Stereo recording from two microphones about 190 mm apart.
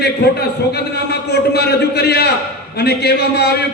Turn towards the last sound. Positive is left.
turn(degrees=60)  # may be behind; listen again after turning